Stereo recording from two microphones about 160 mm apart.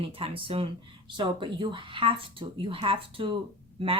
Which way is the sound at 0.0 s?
35° right (ahead or behind).